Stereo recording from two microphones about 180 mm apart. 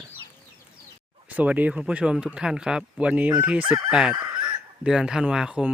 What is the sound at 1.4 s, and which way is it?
Speech, 10° right (ahead or behind).